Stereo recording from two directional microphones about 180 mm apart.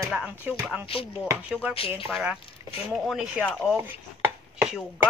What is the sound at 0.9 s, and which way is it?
Chopping, 30° left (ahead or behind).